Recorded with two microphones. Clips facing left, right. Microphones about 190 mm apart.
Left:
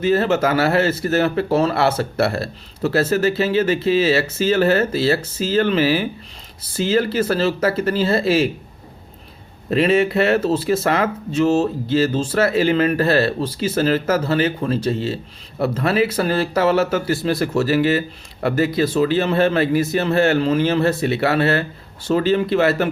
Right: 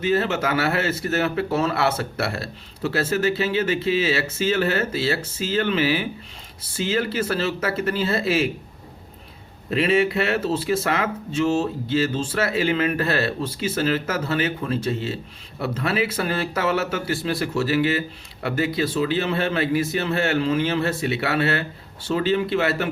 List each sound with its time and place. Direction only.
0.0 s speech: 40° left (ahead or behind)
9.6 s speech: 40° left (ahead or behind)